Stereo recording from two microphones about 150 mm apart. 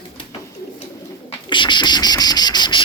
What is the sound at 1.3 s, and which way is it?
Insect, 30° left (ahead or behind).